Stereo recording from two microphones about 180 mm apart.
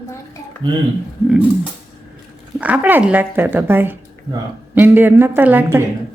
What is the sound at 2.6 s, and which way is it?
Speech, 10° right (ahead or behind).